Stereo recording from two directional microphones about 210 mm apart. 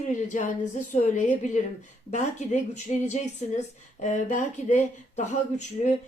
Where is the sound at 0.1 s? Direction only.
35° left (ahead or behind).